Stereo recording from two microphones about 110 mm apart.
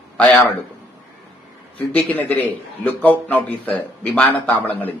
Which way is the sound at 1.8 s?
15° left (ahead or behind).